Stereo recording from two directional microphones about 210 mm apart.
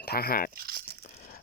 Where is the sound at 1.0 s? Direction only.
35° left (ahead or behind).